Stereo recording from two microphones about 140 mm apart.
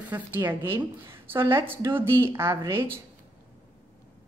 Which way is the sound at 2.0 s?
15° right (ahead or behind).